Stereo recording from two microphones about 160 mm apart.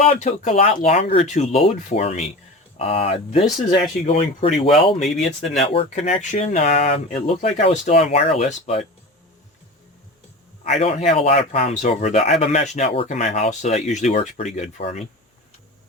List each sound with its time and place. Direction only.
0.0 s speech: 45° left (ahead or behind)
4.9 s speech: centre (ahead or behind)
5.5 s speech: 45° left (ahead or behind)
6.7 s speech: 80° left
7.1 s speech: 45° left (ahead or behind)
10.7 s speech: 40° left (ahead or behind)